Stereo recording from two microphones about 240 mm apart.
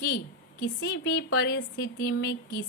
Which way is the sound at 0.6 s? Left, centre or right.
Left.